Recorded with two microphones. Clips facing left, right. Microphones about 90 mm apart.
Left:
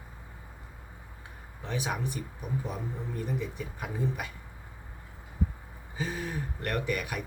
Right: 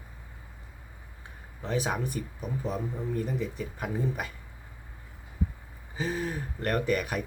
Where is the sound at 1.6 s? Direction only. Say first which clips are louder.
Right 3 dB; 35° right (ahead or behind).